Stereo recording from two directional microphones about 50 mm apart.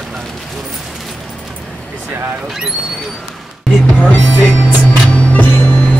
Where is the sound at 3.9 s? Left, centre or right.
Left.